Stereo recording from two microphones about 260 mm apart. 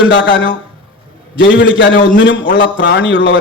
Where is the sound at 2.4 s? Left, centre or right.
Left.